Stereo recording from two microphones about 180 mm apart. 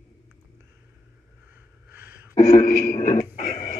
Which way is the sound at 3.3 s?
45° left (ahead or behind).